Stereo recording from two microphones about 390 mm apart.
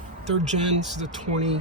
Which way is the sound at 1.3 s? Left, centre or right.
Right.